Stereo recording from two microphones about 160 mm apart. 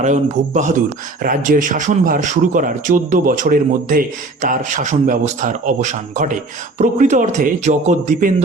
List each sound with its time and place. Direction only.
0.0 s speech: 50° right (ahead or behind)
1.2 s speech: 60° right (ahead or behind)